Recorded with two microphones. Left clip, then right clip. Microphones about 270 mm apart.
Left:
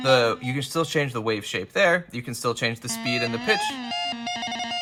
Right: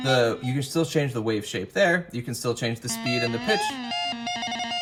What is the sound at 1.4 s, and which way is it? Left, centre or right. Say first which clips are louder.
Speech: even; centre.